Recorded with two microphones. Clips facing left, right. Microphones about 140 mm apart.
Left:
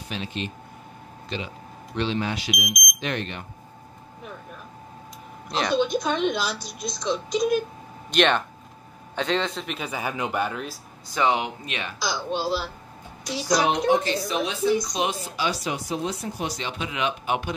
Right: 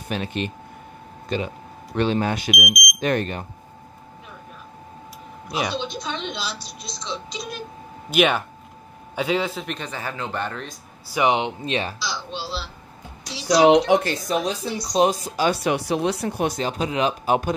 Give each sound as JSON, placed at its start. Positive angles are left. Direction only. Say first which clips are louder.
{"t": 0.1, "sound": "speech", "louder": "right 5 dB", "side_deg": -55}
{"t": 5.5, "sound": "speech", "louder": "left 1 dB", "side_deg": -10}
{"t": 5.9, "sound": "speech", "louder": "left 7 dB", "side_deg": 50}
{"t": 8.1, "sound": "a man's voice", "louder": "right 1 dB", "side_deg": -5}
{"t": 11.1, "sound": "speech", "louder": "right 3 dB", "side_deg": -15}
{"t": 12.0, "sound": "speech", "louder": "left 4 dB", "side_deg": 50}
{"t": 13.6, "sound": "a woman's voice", "louder": "right 8 dB", "side_deg": -90}
{"t": 14.0, "sound": "speech", "louder": "right 2 dB", "side_deg": -45}